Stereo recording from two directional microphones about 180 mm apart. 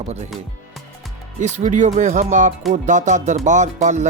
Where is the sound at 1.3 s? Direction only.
40° right (ahead or behind).